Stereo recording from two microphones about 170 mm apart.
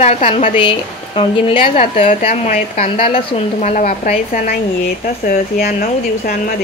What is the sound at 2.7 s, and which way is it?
Speech, 35° left (ahead or behind).